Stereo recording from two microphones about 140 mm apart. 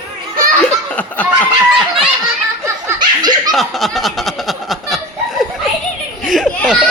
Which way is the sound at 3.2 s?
30° right (ahead or behind).